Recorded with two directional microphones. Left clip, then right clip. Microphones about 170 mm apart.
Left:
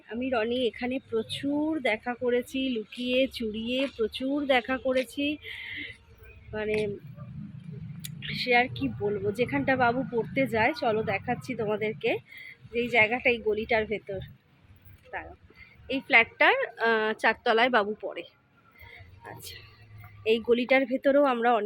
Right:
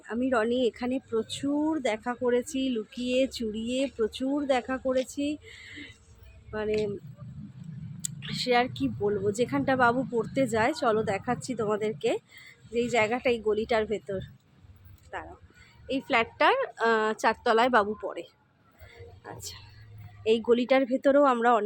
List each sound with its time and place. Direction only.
0.1 s speech: 25° right (ahead or behind)
4.4 s speech: centre (ahead or behind)
5.1 s speech: 5° right (ahead or behind)
8.0 s speech: 15° right (ahead or behind)